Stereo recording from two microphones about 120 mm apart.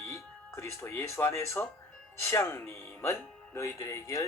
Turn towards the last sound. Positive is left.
turn(degrees=25)  # may be behind; listen again after turning